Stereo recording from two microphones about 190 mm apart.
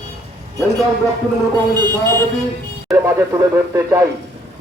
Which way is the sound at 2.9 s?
15° right (ahead or behind).